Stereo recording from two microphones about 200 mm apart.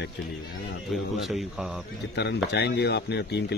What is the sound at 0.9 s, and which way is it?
Speech, centre (ahead or behind).